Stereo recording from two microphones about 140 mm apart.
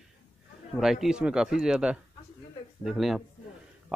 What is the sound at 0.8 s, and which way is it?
Speech, 5° right (ahead or behind).